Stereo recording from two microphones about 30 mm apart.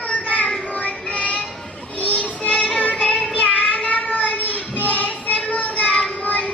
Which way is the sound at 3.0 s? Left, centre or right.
Left.